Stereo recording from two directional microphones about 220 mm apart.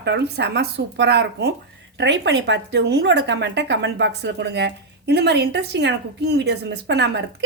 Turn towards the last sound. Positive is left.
turn(degrees=-50)  # may be behind; listen again after turning